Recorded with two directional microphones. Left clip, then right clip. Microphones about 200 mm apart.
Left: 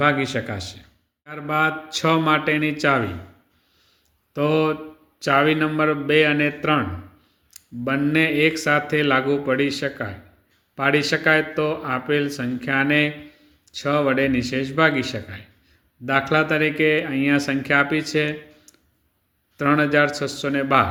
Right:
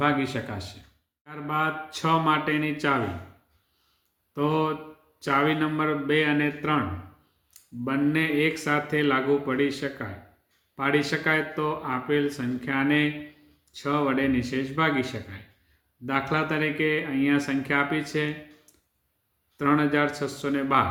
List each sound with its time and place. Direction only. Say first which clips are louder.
0.0 s speech: left 5 dB; 25° left (ahead or behind)
4.4 s speech: left 5 dB; 25° left (ahead or behind)